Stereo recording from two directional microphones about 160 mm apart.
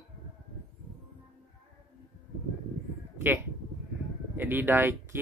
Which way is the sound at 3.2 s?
10° right (ahead or behind).